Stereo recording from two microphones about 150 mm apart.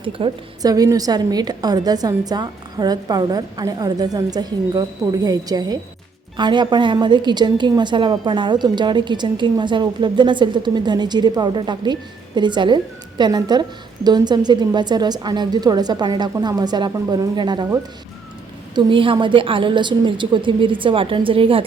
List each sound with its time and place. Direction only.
0.0 s a woman's voice: 35° right (ahead or behind)
18.7 s a woman's voice: 35° right (ahead or behind)